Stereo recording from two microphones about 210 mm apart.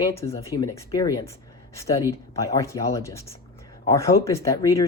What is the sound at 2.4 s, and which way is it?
Speech, 15° left (ahead or behind).